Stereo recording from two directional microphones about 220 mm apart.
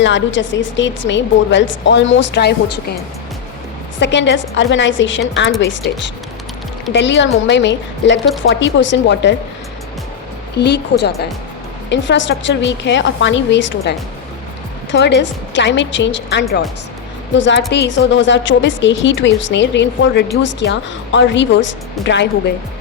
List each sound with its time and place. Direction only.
0.0 s a woman's voice: 55° left (ahead or behind)
4.0 s a woman's voice: 55° left (ahead or behind)
6.9 s a woman's voice: 55° left (ahead or behind)
10.6 s a woman's voice: 50° left (ahead or behind)
14.9 s a woman's voice: 50° left (ahead or behind)